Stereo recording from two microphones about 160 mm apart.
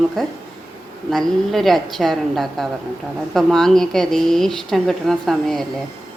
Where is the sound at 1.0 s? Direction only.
Centre (ahead or behind).